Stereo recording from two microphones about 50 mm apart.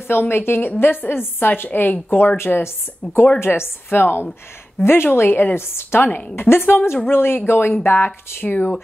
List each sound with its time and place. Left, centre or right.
0.1 s a woman's voice: left